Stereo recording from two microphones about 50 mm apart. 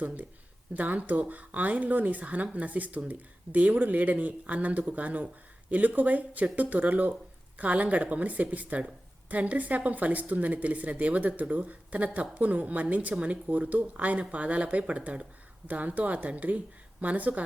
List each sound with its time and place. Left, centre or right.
0.0 s speech: right